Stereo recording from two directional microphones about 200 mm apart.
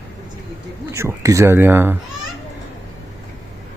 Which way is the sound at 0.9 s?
15° right (ahead or behind).